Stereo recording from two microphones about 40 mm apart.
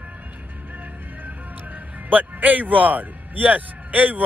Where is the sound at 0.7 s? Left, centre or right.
Right.